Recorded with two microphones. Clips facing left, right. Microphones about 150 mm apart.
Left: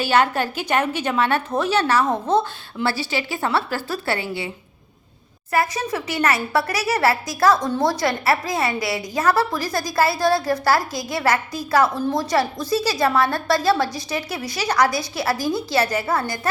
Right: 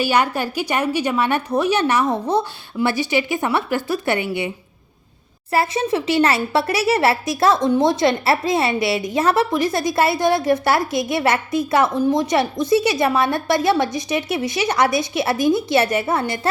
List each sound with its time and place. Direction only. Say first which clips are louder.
0.0 s a woman's voice: even; 10° right (ahead or behind)